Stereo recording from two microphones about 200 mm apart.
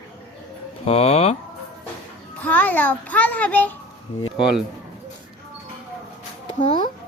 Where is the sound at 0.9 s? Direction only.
30° left (ahead or behind).